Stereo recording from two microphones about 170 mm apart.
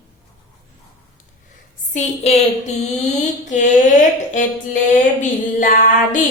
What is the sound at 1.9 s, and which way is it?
A woman's voice, 40° left (ahead or behind).